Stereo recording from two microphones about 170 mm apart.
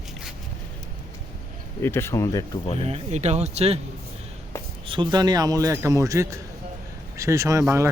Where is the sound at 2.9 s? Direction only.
40° right (ahead or behind).